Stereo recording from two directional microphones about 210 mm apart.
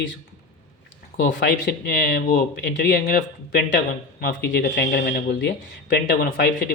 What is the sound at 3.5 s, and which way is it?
Speech, 50° left (ahead or behind).